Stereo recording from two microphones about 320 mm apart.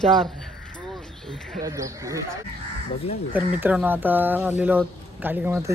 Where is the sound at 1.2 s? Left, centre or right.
Centre.